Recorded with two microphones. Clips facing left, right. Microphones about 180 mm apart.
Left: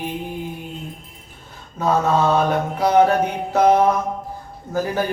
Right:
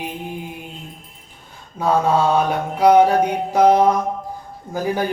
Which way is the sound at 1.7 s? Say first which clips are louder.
Right 1 dB; 10° right (ahead or behind).